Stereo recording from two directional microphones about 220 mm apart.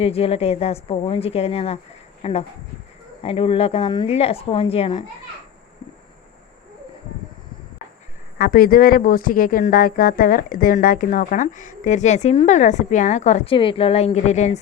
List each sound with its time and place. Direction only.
0.0 s a woman's voice: 25° left (ahead or behind)
8.4 s speech: 40° left (ahead or behind)